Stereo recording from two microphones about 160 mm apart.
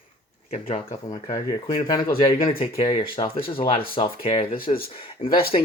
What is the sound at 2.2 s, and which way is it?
Speech, 35° left (ahead or behind).